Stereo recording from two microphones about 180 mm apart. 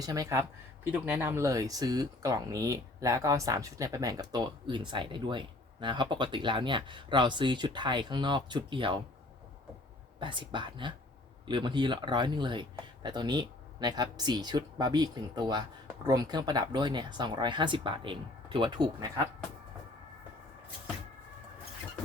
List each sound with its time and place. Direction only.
0.0 s speech: 20° right (ahead or behind)
10.2 s speech: 25° right (ahead or behind)